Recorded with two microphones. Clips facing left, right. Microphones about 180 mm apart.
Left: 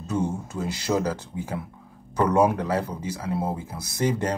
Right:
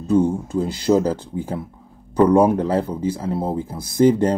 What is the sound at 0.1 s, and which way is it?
Speech, 30° right (ahead or behind).